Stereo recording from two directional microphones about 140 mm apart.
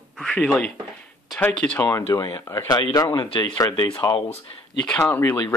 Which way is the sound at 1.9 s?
25° left (ahead or behind).